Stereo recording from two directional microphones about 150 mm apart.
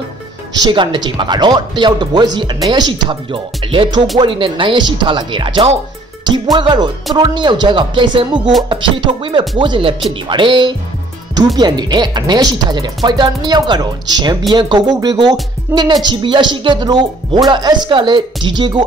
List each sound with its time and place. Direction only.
0.6 s speech: 30° right (ahead or behind)